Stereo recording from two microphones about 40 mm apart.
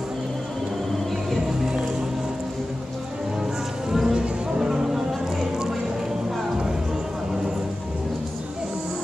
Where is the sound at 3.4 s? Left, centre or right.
Centre.